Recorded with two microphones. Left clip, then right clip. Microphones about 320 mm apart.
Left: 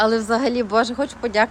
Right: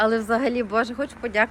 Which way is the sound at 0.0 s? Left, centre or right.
Centre.